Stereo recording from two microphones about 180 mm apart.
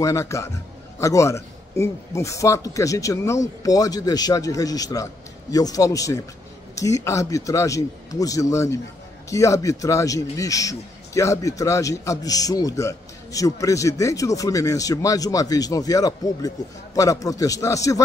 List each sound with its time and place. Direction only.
0.0 s a man's voice: 15° left (ahead or behind)